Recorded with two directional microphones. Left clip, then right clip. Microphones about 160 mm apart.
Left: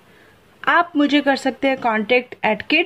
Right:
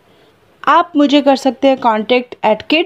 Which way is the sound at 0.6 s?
35° right (ahead or behind).